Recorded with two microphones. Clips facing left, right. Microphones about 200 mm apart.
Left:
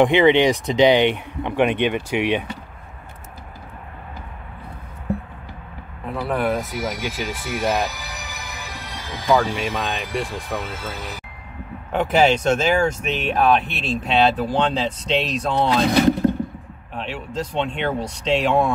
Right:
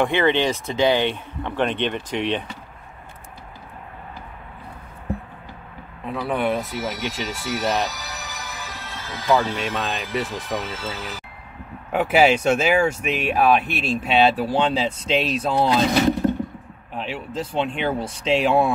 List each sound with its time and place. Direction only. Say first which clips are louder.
0.0 s speech: left 5 dB; 15° left (ahead or behind)
6.0 s speech: left 1 dB; centre (ahead or behind)
6.7 s speech: left 1 dB; 15° left (ahead or behind)
9.8 s speech: even; centre (ahead or behind)
10.5 s speech: even; 10° left (ahead or behind)
11.9 s speech: even; 10° right (ahead or behind)
16.9 s speech: even; 5° right (ahead or behind)